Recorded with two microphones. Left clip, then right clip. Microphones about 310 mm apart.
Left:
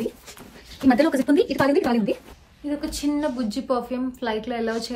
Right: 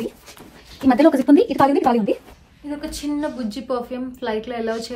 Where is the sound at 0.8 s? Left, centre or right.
Centre.